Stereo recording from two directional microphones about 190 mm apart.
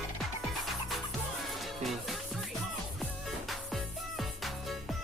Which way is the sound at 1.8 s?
Centre (ahead or behind).